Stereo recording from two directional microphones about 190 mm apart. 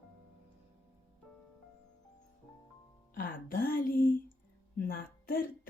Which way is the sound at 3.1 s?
45° left (ahead or behind).